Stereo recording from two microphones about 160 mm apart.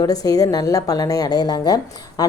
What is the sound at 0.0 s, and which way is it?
A woman's voice, 25° left (ahead or behind).